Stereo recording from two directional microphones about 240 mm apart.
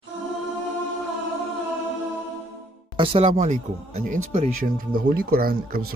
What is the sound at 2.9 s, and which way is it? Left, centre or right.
Speech, right.